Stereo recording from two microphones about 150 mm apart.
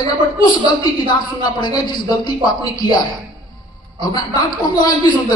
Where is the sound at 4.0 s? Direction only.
25° left (ahead or behind).